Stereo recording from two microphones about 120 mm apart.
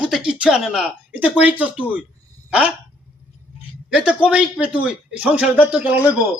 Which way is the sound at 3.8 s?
10° right (ahead or behind).